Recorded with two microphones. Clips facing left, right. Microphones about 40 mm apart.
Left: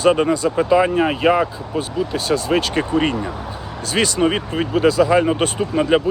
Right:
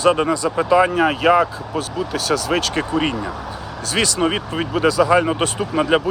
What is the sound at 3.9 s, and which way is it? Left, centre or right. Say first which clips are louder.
Speech: left 1 dB; left.